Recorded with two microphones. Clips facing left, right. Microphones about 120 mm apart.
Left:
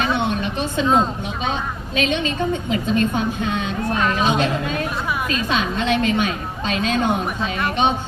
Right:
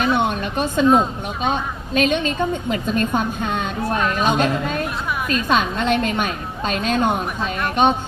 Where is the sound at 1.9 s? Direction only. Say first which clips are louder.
Right 3 dB; 50° right (ahead or behind).